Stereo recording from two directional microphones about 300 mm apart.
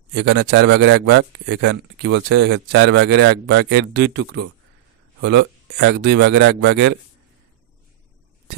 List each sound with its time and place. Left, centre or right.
0.1 s a man's voice: right